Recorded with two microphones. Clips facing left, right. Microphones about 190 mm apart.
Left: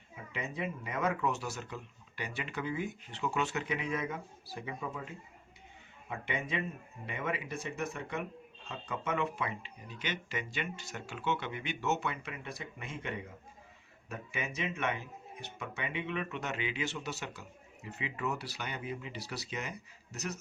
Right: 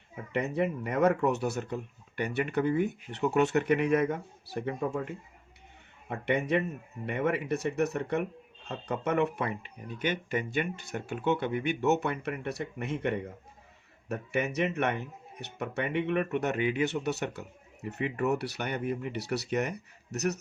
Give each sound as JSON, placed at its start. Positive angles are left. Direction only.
{"t": 0.3, "sound": "speech", "side_deg": -65}